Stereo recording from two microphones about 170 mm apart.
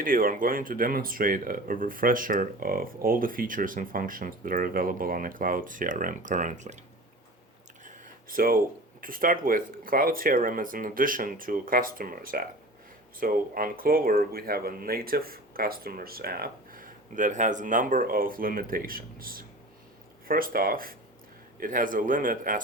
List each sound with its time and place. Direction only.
0.0 s speech: 55° right (ahead or behind)
7.9 s a sound: 55° right (ahead or behind)
9.0 s speech: 55° right (ahead or behind)